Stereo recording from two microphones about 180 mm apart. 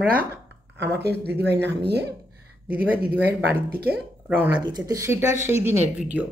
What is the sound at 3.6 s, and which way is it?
Speech, 55° right (ahead or behind).